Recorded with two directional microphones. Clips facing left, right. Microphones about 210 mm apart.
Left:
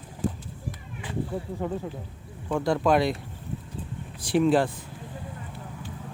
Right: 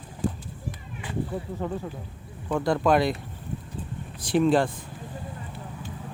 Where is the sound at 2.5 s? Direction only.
Centre (ahead or behind).